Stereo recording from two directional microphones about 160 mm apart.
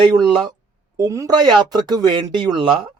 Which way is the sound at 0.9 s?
20° right (ahead or behind).